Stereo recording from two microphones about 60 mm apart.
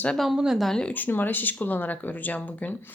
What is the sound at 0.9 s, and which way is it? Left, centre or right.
Speech, left.